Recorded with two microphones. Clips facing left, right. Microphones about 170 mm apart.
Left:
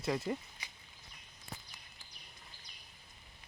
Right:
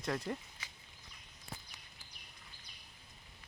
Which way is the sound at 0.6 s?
15° left (ahead or behind).